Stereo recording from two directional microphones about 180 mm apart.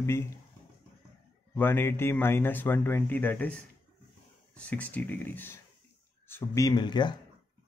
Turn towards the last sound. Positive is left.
turn(degrees=25)  # may be behind; listen again after turning